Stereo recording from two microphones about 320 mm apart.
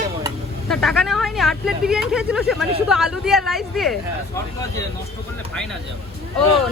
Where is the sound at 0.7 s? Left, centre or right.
Centre.